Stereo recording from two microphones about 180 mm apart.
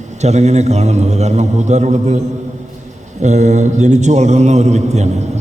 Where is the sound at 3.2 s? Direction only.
40° right (ahead or behind).